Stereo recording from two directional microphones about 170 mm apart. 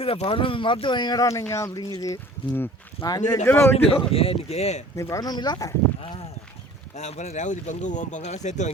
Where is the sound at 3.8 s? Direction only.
35° left (ahead or behind).